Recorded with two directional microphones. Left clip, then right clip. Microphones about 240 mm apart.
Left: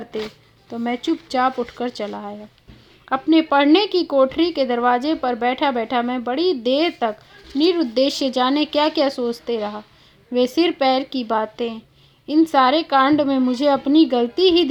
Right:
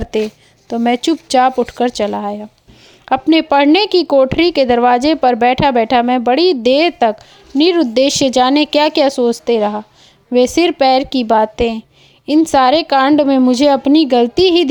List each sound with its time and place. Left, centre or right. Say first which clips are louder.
0.7 s a woman's voice: right 9 dB; right